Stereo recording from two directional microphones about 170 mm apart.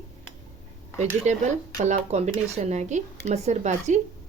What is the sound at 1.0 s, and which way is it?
Speech, 45° right (ahead or behind).